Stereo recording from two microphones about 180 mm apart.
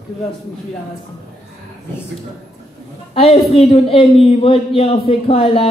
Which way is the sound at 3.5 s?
30° left (ahead or behind).